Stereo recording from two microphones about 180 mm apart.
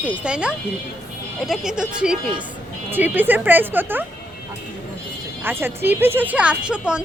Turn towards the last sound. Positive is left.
turn(degrees=-5)  # may be behind; listen again after turning